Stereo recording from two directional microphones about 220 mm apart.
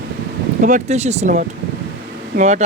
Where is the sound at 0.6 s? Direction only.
35° right (ahead or behind).